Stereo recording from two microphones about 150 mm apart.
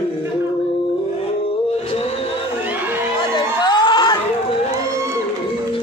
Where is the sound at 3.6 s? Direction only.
30° left (ahead or behind).